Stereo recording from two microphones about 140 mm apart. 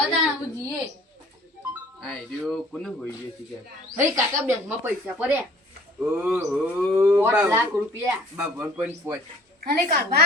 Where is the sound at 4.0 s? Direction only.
20° right (ahead or behind).